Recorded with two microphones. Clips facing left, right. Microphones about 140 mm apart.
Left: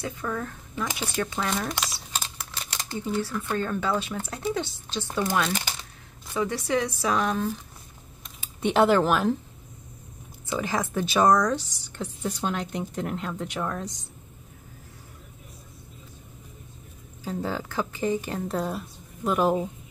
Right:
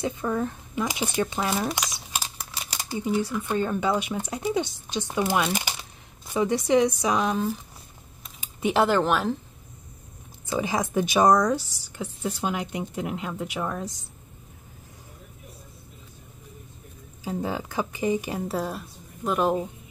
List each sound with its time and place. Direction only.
0.0 s speech: 20° right (ahead or behind); by 9.4 s centre (ahead or behind)
10.4 s speech: 15° right (ahead or behind)
17.2 s speech: 15° right (ahead or behind)